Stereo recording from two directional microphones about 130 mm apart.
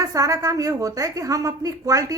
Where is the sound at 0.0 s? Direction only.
25° right (ahead or behind).